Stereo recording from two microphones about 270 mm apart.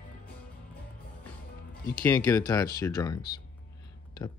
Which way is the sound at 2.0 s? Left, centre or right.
Centre.